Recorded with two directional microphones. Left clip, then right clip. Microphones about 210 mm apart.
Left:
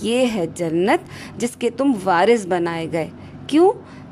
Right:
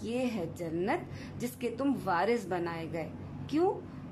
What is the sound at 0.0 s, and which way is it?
Speech, 40° left (ahead or behind).